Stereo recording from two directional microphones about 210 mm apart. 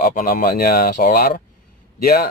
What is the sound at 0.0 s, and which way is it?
Speech, 45° left (ahead or behind).